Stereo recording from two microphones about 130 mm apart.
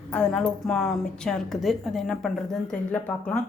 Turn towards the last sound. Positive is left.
turn(degrees=10)  # may be behind; listen again after turning